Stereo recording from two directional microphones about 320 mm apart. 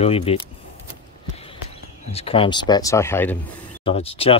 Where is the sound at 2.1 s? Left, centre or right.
Centre.